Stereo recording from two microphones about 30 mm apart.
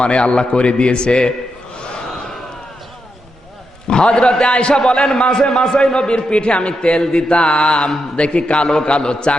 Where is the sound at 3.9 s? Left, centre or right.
Left.